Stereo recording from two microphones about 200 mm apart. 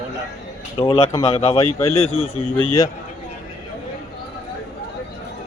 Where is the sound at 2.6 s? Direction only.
15° left (ahead or behind).